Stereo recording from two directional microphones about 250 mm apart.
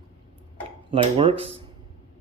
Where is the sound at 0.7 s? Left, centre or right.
Right.